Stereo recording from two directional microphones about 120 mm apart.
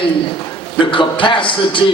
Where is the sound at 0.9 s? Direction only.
45° left (ahead or behind).